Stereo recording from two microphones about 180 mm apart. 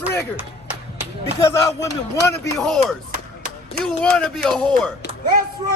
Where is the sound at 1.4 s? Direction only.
15° left (ahead or behind).